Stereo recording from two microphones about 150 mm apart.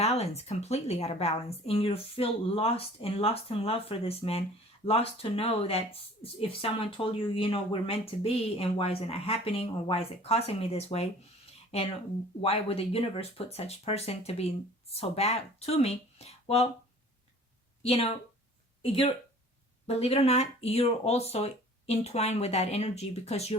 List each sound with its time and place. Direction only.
0.0 s speech: 45° left (ahead or behind)
12.4 s speech: 40° left (ahead or behind)
17.8 s speech: 40° left (ahead or behind)